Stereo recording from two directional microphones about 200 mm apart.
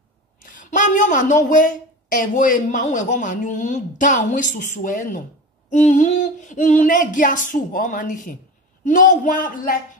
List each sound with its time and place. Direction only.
0.5 s a woman's voice: 40° left (ahead or behind)